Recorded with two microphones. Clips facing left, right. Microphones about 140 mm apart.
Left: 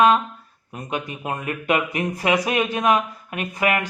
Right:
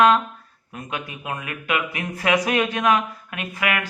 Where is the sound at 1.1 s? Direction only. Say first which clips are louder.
Left 4 dB; 35° left (ahead or behind).